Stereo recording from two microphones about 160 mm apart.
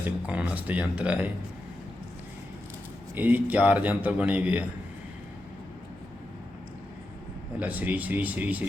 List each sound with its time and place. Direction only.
0.3 s speech: 10° right (ahead or behind)
3.2 s speech: 10° right (ahead or behind)
7.6 s speech: 10° right (ahead or behind)